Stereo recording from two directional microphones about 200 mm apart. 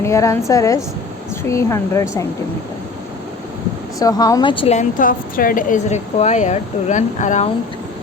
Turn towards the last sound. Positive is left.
turn(degrees=35)  # may be behind; listen again after turning